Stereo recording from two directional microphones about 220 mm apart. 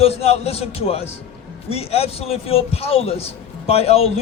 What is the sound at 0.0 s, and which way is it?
A man's voice, 25° left (ahead or behind).